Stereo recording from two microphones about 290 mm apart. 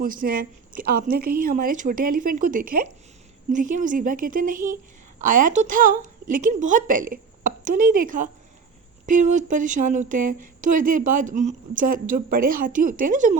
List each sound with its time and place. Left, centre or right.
0.0 s a woman's voice: right